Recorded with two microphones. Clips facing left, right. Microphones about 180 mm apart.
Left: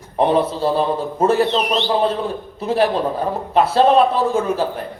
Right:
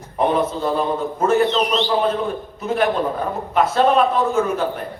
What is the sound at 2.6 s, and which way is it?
A man's voice, 30° left (ahead or behind).